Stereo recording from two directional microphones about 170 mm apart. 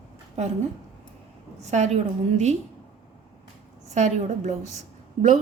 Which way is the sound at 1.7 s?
45° right (ahead or behind).